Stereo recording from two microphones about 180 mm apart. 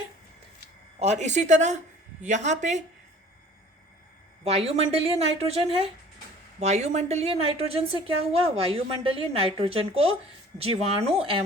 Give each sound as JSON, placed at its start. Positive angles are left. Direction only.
{"t": 0.9, "sound": "a woman's voice", "side_deg": -40}
{"t": 4.4, "sound": "a woman's voice", "side_deg": -35}